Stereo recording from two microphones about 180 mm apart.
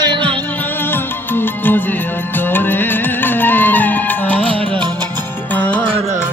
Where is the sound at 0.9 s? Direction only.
10° left (ahead or behind).